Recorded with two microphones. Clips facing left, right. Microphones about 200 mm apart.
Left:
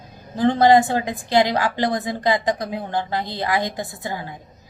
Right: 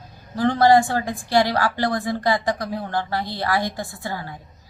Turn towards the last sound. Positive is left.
turn(degrees=20)  # may be behind; listen again after turning